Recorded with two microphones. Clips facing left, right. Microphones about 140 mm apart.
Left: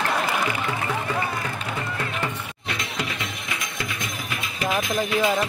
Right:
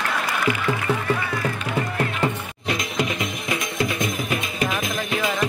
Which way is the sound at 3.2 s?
25° right (ahead or behind).